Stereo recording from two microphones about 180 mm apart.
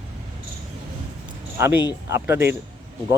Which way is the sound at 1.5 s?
15° right (ahead or behind).